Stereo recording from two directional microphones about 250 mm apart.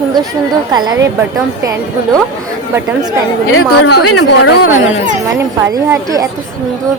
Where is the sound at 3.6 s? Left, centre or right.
Left.